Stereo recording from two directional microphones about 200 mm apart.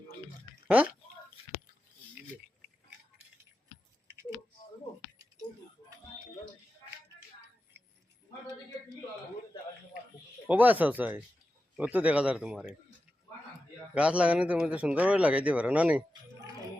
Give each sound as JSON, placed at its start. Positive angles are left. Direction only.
{"t": 8.3, "sound": "a sound", "side_deg": 20}
{"t": 10.4, "sound": "a man's voice", "side_deg": -10}
{"t": 13.9, "sound": "a man's voice", "side_deg": -5}